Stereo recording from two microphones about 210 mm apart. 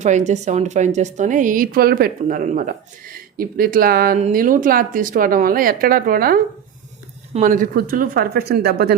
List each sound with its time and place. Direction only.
0.0 s a woman's voice: 35° right (ahead or behind)